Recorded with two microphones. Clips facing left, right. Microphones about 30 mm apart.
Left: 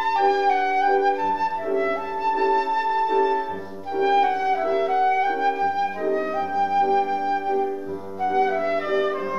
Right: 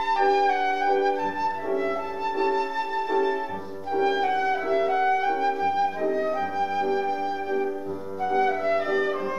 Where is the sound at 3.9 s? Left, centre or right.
Centre.